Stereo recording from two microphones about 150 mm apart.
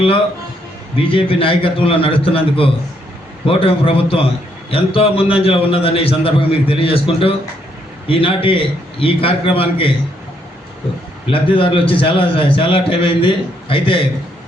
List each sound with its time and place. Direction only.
0.9 s a man's voice: 35° left (ahead or behind)
11.3 s a man's voice: 35° left (ahead or behind)